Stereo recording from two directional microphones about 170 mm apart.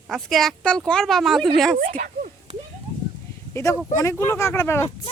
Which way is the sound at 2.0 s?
45° right (ahead or behind).